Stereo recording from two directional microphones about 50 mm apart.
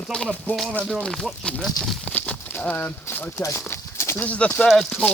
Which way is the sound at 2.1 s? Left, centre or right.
Left.